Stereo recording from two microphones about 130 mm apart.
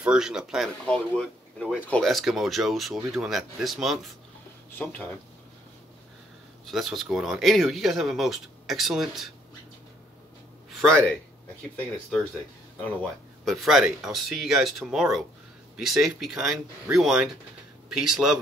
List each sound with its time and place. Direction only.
0.0 s speech: 5° right (ahead or behind)
0.8 s speech: 10° left (ahead or behind)
4.6 s speech: 15° left (ahead or behind)
6.6 s speech: centre (ahead or behind)
10.7 s a sound: centre (ahead or behind)
13.5 s speech: centre (ahead or behind)